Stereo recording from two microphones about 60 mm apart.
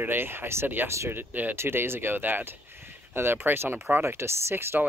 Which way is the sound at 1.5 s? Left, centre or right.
Right.